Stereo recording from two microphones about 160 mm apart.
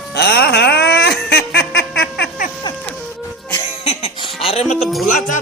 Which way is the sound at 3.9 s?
40° left (ahead or behind).